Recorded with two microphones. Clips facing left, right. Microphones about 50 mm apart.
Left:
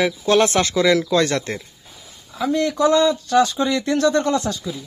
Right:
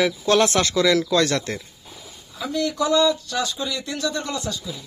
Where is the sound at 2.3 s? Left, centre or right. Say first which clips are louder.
Left 4 dB; left.